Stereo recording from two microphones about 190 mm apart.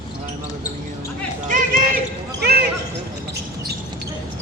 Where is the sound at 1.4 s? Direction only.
45° right (ahead or behind).